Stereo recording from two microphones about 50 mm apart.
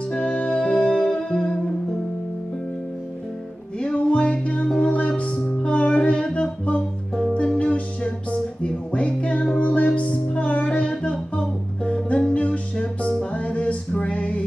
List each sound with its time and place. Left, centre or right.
0.1 s music: centre
3.8 s music: left
5.9 s a sound: centre
7.3 s music: left